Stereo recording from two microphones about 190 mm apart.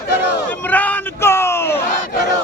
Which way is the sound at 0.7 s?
10° left (ahead or behind).